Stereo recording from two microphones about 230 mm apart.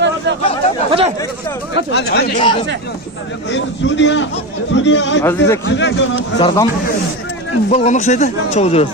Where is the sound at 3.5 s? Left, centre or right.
Left.